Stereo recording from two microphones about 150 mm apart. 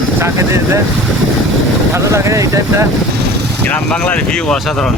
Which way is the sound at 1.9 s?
20° right (ahead or behind).